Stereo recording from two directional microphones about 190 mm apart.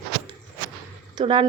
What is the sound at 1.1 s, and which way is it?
Speech, 25° right (ahead or behind).